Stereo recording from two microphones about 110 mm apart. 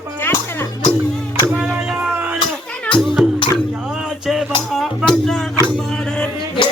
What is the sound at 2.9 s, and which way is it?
Music, 5° left (ahead or behind).